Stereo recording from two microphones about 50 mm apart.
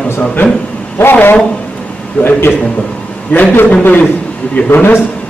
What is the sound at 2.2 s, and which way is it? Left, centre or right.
A man's voice, left.